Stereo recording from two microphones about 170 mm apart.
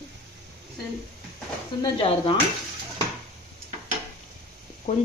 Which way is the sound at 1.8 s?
30° left (ahead or behind).